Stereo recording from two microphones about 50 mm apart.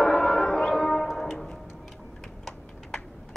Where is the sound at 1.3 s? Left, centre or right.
Centre.